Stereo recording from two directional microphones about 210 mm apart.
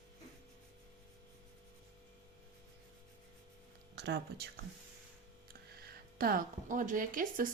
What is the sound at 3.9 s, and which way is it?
Speech, 55° right (ahead or behind).